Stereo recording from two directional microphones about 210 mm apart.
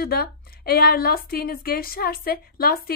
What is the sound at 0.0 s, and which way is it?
A woman's voice, 45° left (ahead or behind).